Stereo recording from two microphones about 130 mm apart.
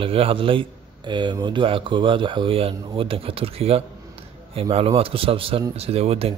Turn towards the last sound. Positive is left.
turn(degrees=-50)  # may be behind; listen again after turning